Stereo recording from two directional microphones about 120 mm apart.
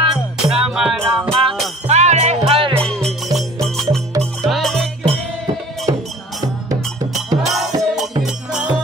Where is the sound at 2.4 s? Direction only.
50° right (ahead or behind).